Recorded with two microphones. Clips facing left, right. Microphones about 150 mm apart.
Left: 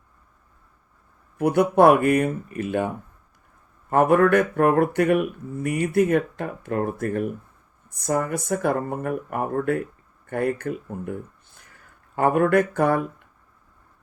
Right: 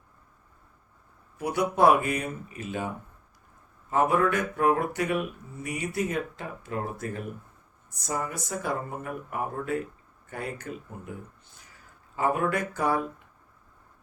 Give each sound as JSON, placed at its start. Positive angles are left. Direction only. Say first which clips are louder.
{"t": 1.4, "sound": "speech", "louder": "left 7 dB", "side_deg": 55}